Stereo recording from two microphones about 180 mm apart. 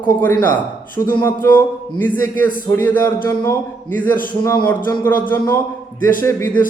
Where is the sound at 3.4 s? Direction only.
10° left (ahead or behind).